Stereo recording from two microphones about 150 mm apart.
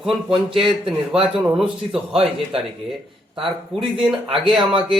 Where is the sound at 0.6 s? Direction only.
5° right (ahead or behind).